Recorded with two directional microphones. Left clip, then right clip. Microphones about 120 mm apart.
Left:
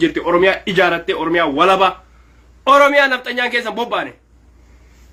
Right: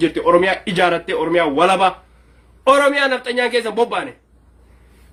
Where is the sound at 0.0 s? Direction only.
30° right (ahead or behind).